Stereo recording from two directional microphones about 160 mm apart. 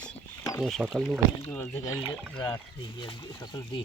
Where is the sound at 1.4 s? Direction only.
10° left (ahead or behind).